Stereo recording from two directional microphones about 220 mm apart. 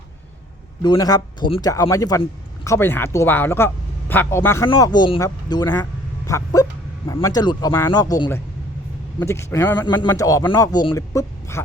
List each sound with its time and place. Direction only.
0.8 s a man's voice: 20° left (ahead or behind)